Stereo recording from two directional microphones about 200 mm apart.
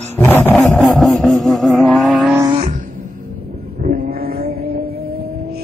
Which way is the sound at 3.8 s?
45° right (ahead or behind).